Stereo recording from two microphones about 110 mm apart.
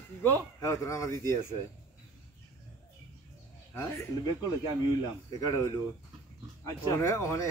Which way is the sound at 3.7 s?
25° left (ahead or behind).